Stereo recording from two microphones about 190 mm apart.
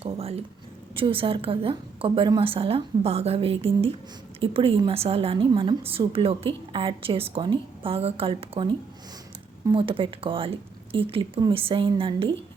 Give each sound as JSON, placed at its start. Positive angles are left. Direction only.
{"t": 0.0, "sound": "a woman's voice", "side_deg": -30}